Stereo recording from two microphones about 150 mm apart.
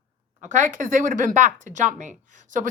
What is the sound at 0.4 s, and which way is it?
Speech, 55° right (ahead or behind).